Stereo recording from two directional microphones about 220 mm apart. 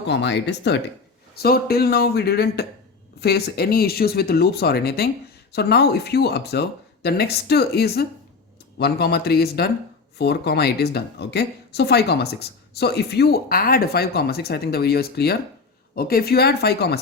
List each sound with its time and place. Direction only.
0.1 s speech: 50° left (ahead or behind)